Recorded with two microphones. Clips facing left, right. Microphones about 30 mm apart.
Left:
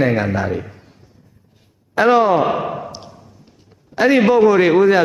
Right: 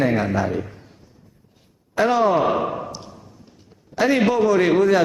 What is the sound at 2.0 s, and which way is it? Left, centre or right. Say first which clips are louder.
Speech: left 4 dB; left.